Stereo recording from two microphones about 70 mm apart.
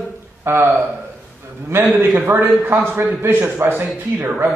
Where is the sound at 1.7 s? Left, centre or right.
Right.